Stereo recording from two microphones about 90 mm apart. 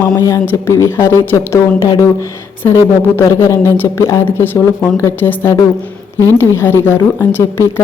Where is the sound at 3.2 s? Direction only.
30° left (ahead or behind).